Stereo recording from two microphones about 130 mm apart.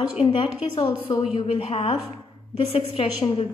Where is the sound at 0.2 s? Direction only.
45° left (ahead or behind).